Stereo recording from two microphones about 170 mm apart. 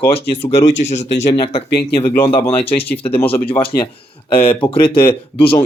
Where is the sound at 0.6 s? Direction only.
45° left (ahead or behind).